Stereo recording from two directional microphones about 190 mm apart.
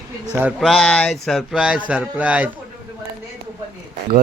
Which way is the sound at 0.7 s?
5° left (ahead or behind).